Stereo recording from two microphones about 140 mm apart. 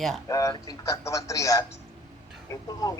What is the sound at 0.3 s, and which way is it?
A man's voice, 25° left (ahead or behind).